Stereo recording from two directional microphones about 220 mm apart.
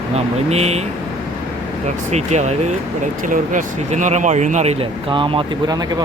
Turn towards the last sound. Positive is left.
turn(degrees=-20)  # may be behind; listen again after turning